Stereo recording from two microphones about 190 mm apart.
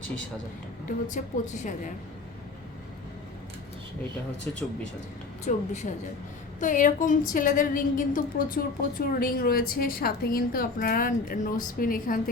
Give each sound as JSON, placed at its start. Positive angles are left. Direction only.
{"t": 0.9, "sound": "a woman's voice", "side_deg": 40}
{"t": 4.5, "sound": "speech", "side_deg": 10}
{"t": 5.5, "sound": "a woman's voice", "side_deg": 40}